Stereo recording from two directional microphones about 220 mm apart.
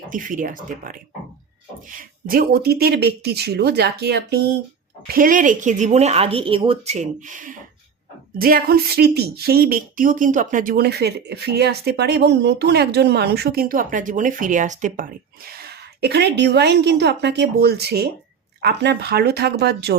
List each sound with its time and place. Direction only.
0.1 s speech: 35° right (ahead or behind)